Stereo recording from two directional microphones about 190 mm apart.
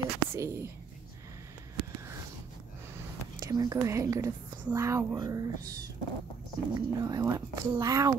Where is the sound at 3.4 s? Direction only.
20° right (ahead or behind).